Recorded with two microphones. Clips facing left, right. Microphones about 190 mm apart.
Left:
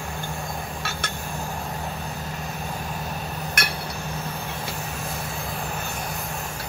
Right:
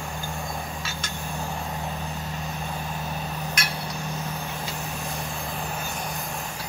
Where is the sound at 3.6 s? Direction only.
60° left (ahead or behind).